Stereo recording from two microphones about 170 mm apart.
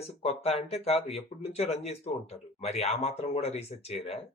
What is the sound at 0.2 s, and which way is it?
Speech, 35° left (ahead or behind).